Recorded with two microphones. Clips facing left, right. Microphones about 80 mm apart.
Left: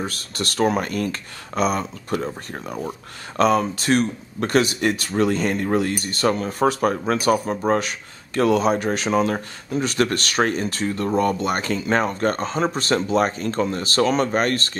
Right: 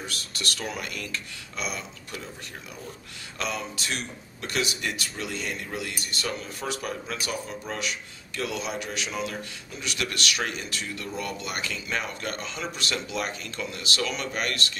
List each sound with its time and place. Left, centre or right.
0.0 s speech: left